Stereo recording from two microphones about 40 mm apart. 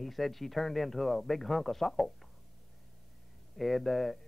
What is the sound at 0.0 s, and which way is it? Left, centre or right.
Speech, centre.